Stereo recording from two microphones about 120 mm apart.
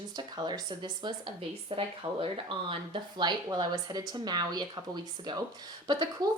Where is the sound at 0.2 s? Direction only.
35° right (ahead or behind).